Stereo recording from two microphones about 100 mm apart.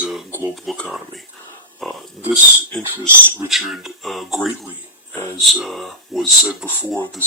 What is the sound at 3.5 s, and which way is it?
Speech, centre (ahead or behind).